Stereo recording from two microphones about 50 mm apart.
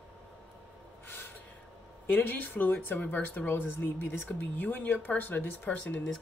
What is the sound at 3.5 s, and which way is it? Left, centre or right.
Speech, left.